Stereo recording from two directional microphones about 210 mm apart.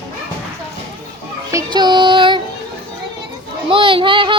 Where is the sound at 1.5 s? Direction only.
15° right (ahead or behind).